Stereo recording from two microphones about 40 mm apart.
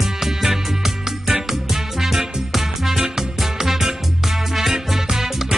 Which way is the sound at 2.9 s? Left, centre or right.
Centre.